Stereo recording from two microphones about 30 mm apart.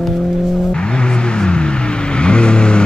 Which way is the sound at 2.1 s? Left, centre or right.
Left.